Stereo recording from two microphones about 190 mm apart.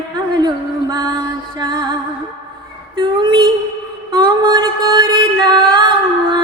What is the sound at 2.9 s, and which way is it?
Music, 25° right (ahead or behind).